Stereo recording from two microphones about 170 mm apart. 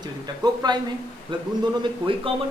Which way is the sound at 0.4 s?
25° right (ahead or behind).